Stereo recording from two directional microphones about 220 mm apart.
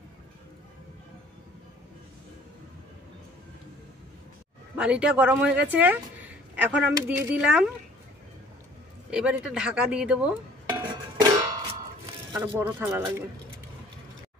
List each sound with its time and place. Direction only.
4.7 s speech: 5° right (ahead or behind)
9.1 s dishes: 5° right (ahead or behind)
11.0 s music: 15° right (ahead or behind)
12.7 s speech: 10° right (ahead or behind)